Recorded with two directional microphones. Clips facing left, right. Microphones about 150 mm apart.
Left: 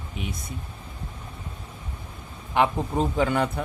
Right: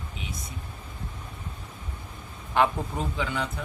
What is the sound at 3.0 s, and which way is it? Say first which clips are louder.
Speech: left 8 dB; 45° left (ahead or behind).